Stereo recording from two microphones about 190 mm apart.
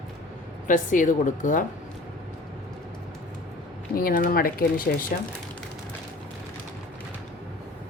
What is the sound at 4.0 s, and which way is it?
Speech, 50° left (ahead or behind).